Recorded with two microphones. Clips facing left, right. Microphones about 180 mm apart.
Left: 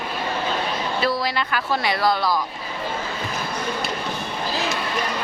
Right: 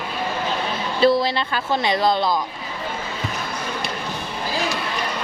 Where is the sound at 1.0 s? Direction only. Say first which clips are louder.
Right 9 dB; 25° right (ahead or behind).